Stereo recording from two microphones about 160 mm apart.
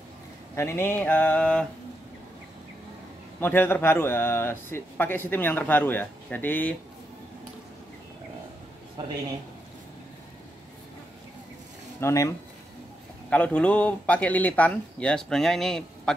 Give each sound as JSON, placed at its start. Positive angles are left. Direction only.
{"t": 0.6, "sound": "a man's voice", "side_deg": 15}
{"t": 3.3, "sound": "a man's voice", "side_deg": 15}
{"t": 12.0, "sound": "speech", "side_deg": 20}
{"t": 13.3, "sound": "a man's voice", "side_deg": 10}